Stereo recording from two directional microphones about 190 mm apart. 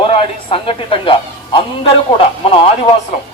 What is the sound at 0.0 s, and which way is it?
A man's voice, 30° left (ahead or behind).